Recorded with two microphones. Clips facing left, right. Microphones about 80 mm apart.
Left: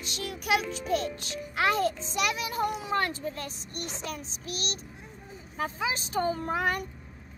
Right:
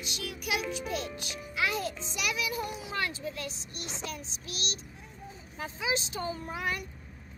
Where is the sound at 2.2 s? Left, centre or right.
Left.